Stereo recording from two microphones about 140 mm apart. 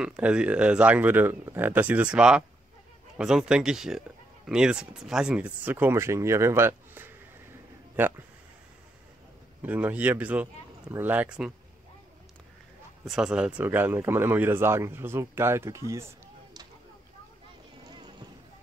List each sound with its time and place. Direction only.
0.0 s speech: 5° right (ahead or behind)
9.6 s speech: 10° right (ahead or behind)
13.0 s speech: 5° right (ahead or behind); by 16.6 s 20° right (ahead or behind)
17.8 s vehicle: 30° right (ahead or behind)